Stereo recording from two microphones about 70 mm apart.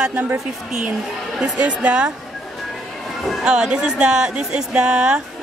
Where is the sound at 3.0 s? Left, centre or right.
Centre.